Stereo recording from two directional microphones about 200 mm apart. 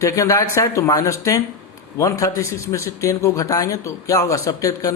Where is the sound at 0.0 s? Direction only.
15° left (ahead or behind).